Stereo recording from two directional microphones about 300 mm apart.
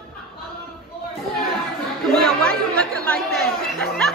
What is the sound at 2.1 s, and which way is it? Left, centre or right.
Chatter, centre.